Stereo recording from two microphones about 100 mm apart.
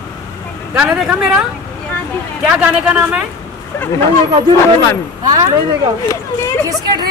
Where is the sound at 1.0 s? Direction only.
10° right (ahead or behind).